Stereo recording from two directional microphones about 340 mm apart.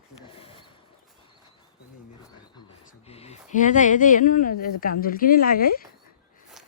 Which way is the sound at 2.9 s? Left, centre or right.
Centre.